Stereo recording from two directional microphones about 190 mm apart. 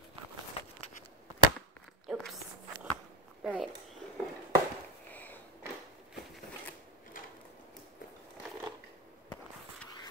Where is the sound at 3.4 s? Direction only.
Centre (ahead or behind).